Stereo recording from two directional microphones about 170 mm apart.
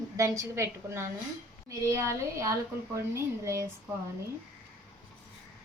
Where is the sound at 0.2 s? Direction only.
15° right (ahead or behind).